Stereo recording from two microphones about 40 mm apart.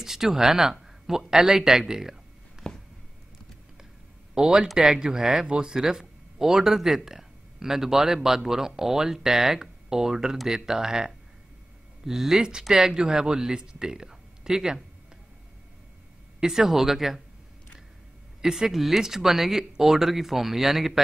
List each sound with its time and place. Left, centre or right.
0.0 s speech: centre
2.6 s a sound: centre
4.4 s speech: centre
16.3 s speech: centre
18.4 s speech: centre